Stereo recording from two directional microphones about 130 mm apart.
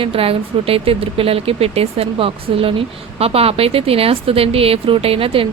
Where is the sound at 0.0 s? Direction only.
45° right (ahead or behind).